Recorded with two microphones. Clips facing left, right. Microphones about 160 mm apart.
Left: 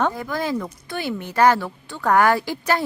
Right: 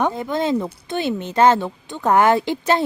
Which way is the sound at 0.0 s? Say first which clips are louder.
Right 3 dB; 20° right (ahead or behind).